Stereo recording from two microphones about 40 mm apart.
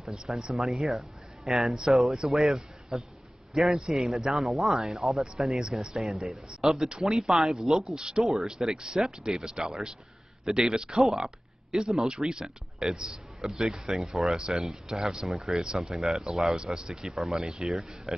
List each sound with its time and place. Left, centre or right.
0.1 s a man's voice: centre
5.6 s speech: centre
5.9 s a man's voice: centre
10.7 s speech: right
11.0 s speech: centre
15.2 s speech: centre
15.6 s speech: centre
16.0 s speech: centre
17.6 s speech: centre